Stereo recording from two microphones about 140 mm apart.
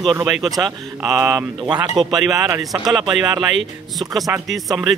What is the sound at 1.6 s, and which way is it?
Speech, 25° right (ahead or behind).